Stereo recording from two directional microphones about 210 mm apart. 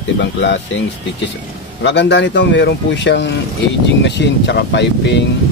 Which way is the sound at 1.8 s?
55° left (ahead or behind).